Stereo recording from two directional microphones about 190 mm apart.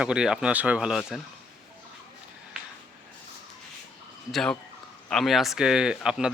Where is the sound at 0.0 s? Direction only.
5° right (ahead or behind).